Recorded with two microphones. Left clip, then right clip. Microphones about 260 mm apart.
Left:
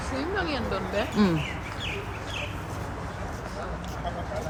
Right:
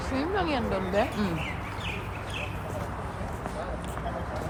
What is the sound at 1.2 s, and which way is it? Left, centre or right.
Speech, left.